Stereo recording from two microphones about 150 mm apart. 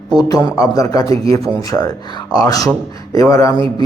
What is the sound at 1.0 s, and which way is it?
Speech, 40° right (ahead or behind).